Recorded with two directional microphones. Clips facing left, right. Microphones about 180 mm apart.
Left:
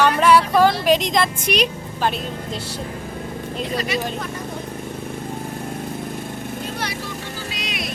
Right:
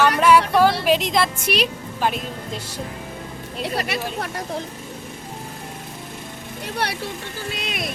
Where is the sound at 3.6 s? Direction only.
65° right (ahead or behind).